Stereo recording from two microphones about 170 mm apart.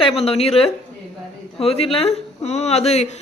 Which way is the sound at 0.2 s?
35° left (ahead or behind).